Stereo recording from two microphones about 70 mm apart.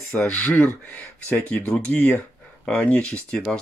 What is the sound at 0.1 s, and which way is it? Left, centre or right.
Speech, centre.